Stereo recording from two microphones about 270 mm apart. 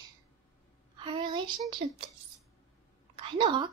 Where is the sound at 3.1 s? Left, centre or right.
Centre.